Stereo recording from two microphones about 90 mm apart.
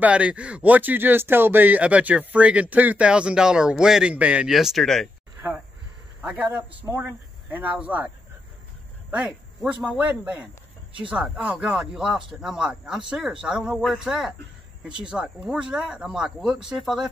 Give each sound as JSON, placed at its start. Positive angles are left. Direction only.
{"t": 0.0, "sound": "speech", "side_deg": -15}
{"t": 6.2, "sound": "speech", "side_deg": -20}
{"t": 9.6, "sound": "speech", "side_deg": -5}